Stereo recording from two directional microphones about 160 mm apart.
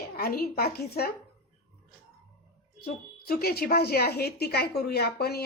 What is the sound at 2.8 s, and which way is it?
A woman's voice, 70° left (ahead or behind).